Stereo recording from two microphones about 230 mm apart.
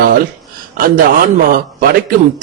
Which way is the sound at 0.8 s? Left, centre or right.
Right.